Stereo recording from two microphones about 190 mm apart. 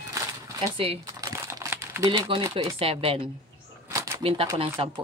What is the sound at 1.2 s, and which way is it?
Crumpling, 15° right (ahead or behind).